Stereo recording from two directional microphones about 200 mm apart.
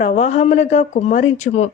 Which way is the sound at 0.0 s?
35° left (ahead or behind).